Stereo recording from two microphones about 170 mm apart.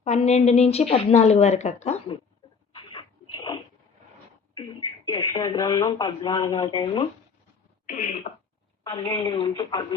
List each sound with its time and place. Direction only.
0.0 s a woman's voice: 40° left (ahead or behind)
2.7 s dog: 30° left (ahead or behind)
5.0 s speech: 25° left (ahead or behind)
7.9 s speech: 45° left (ahead or behind)
8.8 s speech: 30° left (ahead or behind)